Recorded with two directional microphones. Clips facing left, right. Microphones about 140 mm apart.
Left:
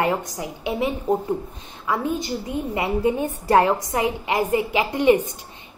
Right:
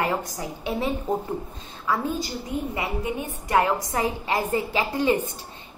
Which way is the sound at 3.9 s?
20° left (ahead or behind).